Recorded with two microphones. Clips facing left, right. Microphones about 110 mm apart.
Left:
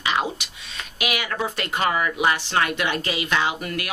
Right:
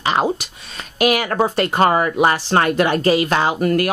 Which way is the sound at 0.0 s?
40° right (ahead or behind).